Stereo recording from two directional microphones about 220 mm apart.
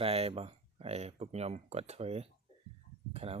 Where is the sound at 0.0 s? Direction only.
25° right (ahead or behind).